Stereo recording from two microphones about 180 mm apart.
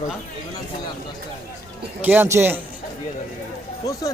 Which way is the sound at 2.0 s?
10° right (ahead or behind).